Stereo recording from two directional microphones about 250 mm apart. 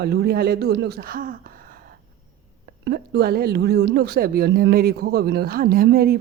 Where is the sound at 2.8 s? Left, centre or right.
Right.